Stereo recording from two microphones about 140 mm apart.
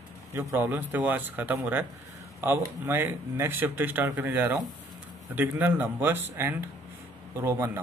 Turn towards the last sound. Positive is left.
turn(degrees=-20)  # may be behind; listen again after turning